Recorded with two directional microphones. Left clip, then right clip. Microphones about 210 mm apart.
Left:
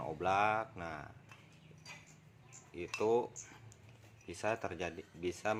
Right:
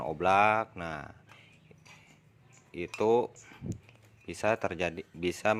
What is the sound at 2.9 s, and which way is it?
Speech, 35° right (ahead or behind).